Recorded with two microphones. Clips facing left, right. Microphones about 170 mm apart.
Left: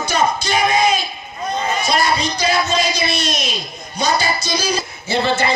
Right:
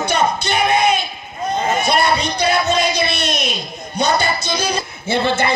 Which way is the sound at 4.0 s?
55° right (ahead or behind).